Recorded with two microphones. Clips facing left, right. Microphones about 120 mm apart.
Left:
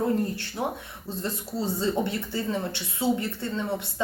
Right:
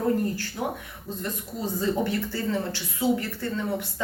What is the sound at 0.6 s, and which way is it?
A woman's voice, 25° left (ahead or behind).